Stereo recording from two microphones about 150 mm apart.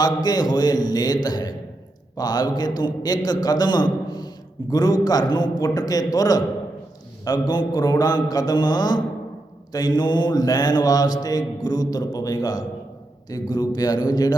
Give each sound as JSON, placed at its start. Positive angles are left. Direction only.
{"t": 0.0, "sound": "mantra", "side_deg": 25}